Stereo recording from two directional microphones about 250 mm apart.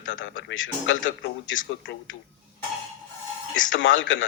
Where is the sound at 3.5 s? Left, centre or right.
Left.